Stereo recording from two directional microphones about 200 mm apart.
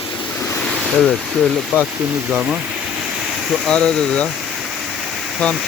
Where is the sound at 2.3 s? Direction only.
5° right (ahead or behind).